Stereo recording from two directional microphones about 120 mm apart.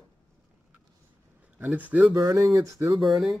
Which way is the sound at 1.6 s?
10° right (ahead or behind).